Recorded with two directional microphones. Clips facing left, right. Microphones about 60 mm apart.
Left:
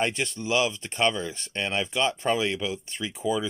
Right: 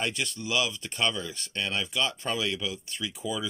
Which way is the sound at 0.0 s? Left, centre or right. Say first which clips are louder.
Left 4 dB; left.